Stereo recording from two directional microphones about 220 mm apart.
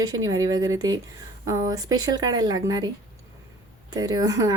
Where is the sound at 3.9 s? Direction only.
15° right (ahead or behind).